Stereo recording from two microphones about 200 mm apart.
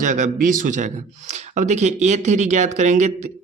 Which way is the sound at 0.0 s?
40° right (ahead or behind).